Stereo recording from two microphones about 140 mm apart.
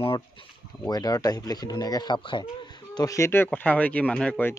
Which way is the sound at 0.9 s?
25° left (ahead or behind).